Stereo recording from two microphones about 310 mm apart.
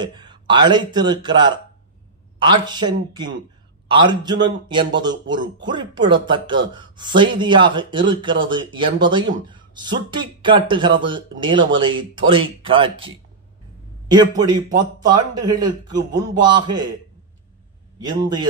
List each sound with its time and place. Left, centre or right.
0.0 s speech: centre
18.0 s speech: centre